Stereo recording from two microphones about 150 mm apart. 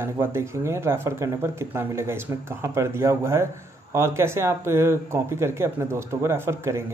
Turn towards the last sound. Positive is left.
turn(degrees=-15)  # may be behind; listen again after turning